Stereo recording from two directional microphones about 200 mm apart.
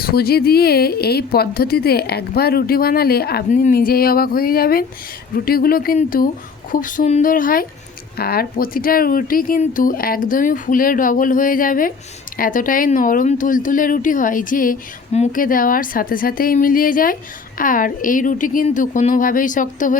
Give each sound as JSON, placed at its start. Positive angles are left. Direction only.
{"t": 0.0, "sound": "a woman's voice", "side_deg": 50}